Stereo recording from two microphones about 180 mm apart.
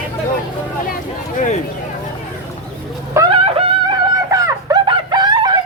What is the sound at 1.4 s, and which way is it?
Speech, 40° left (ahead or behind).